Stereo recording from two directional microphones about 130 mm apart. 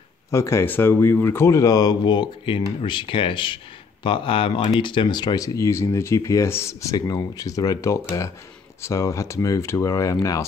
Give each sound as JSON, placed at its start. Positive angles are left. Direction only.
{"t": 0.3, "sound": "speech", "side_deg": 20}